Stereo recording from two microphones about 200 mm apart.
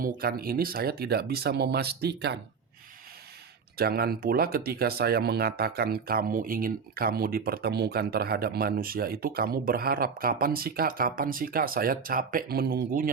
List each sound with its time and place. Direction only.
0.0 s speech: 45° right (ahead or behind)
3.8 s speech: 50° right (ahead or behind)